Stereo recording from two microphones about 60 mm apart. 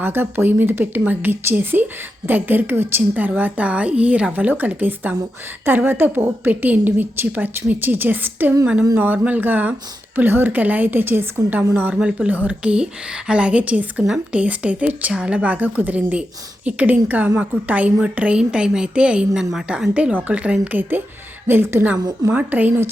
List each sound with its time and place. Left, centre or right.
0.0 s a woman's voice: right
8.6 s a woman's voice: centre; by 11.4 s right
11.9 s speech: centre
19.3 s a woman's voice: centre
19.9 s a woman's voice: centre
21.4 s a woman's voice: right
22.3 s speech: right